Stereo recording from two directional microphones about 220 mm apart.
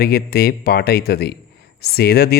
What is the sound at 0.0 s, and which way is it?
Speech, 45° left (ahead or behind).